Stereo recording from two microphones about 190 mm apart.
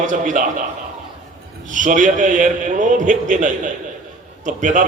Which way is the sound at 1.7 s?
40° right (ahead or behind).